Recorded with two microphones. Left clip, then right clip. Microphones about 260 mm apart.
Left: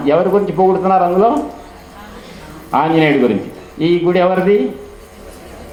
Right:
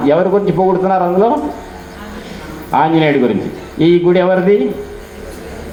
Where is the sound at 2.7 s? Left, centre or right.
Right.